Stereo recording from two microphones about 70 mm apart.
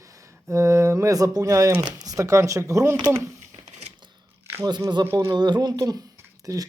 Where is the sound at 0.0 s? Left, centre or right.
Right.